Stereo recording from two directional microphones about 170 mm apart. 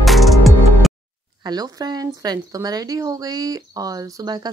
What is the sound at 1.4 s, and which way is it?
Speech, 25° right (ahead or behind).